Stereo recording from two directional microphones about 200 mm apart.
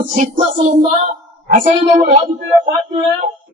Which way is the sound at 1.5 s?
40° right (ahead or behind).